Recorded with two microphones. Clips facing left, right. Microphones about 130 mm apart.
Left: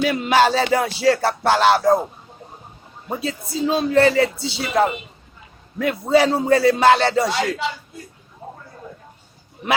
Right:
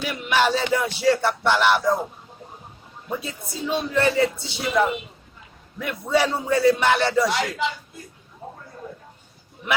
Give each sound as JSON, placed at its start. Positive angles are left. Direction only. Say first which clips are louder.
{"t": 0.0, "sound": "music", "louder": "left 5 dB", "side_deg": 90}
{"t": 3.1, "sound": "a man's voice", "louder": "left 5 dB", "side_deg": 85}
{"t": 5.8, "sound": "music", "louder": "left 5 dB", "side_deg": 90}